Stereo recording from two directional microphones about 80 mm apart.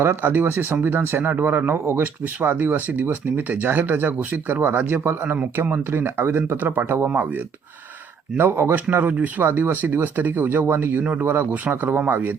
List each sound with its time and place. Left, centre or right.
0.0 s speech: right